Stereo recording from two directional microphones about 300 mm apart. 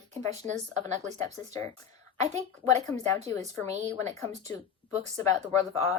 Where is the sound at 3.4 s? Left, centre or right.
Right.